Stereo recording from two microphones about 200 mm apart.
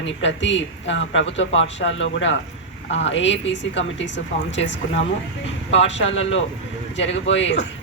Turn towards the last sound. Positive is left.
turn(degrees=60)  # may be behind; listen again after turning